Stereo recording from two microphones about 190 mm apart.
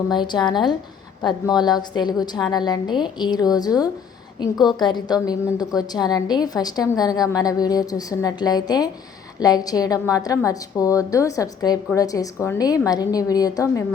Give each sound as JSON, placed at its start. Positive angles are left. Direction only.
{"t": 0.1, "sound": "a woman's voice", "side_deg": 25}